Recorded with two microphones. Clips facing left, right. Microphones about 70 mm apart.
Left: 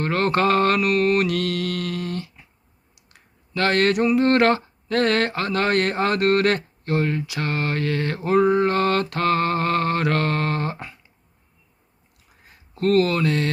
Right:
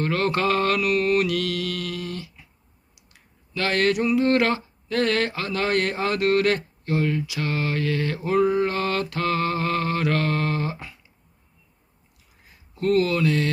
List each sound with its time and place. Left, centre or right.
0.0 s speech: left
12.5 s speech: left